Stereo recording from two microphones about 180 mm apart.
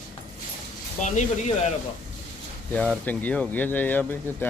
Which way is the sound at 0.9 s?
40° left (ahead or behind).